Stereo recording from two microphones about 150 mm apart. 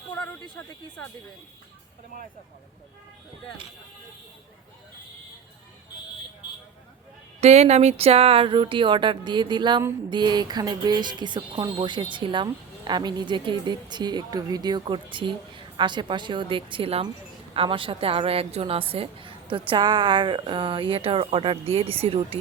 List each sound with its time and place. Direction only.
7.4 s a woman's voice: 45° right (ahead or behind)